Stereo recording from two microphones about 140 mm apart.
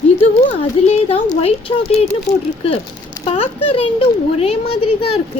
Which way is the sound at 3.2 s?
40° left (ahead or behind).